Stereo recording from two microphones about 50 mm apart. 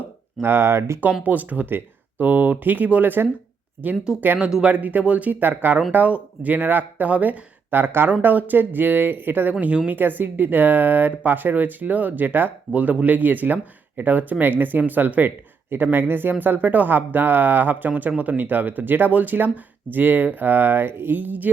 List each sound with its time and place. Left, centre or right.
0.4 s speech: right
1.2 s speech: right
4.4 s speech: centre
4.6 s speech: right
5.3 s speech: right
9.9 s speech: right
12.7 s speech: right